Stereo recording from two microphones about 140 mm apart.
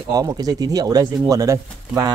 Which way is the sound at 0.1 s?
25° right (ahead or behind).